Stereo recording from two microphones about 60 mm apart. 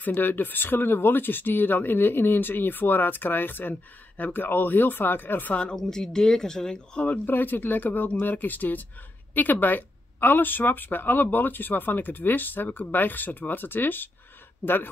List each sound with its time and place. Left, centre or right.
0.0 s speech: left
5.8 s speech: centre
7.1 s speech: left